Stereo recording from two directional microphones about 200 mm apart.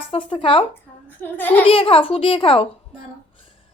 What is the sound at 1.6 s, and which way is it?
A woman's voice, 25° left (ahead or behind).